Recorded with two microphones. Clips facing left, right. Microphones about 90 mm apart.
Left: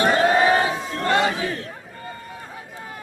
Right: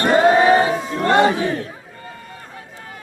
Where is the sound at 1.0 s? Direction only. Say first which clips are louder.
Right 5 dB; 30° right (ahead or behind).